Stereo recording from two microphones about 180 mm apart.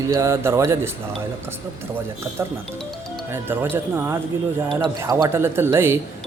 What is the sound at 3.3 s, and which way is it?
Speech, 10° right (ahead or behind).